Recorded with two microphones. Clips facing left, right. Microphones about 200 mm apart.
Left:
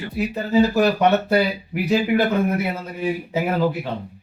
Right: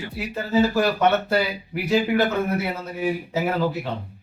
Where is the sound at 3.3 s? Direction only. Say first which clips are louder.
Left 4 dB; 10° left (ahead or behind).